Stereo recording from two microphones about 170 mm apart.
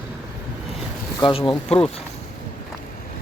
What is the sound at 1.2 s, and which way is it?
Speech, 30° left (ahead or behind).